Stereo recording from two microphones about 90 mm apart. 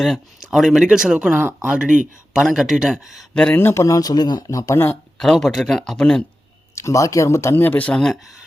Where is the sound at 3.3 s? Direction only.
10° left (ahead or behind).